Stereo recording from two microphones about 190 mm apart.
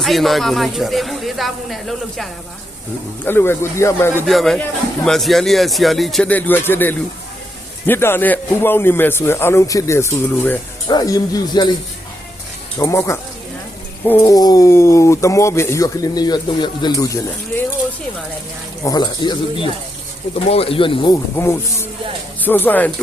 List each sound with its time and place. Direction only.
0.0 s a man's voice: centre (ahead or behind)
3.2 s speech: 10° left (ahead or behind)
4.3 s a man's voice: centre (ahead or behind); by 11.7 s 20° left (ahead or behind)
12.8 s speech: 15° left (ahead or behind)
18.9 s speech: 20° left (ahead or behind)
21.3 s speech: 15° left (ahead or behind)